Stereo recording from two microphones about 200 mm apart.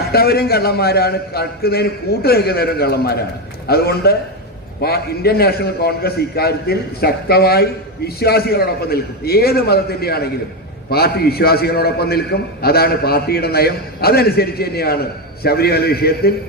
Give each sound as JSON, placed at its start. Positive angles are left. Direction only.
{"t": 0.1, "sound": "a man's voice", "side_deg": 50}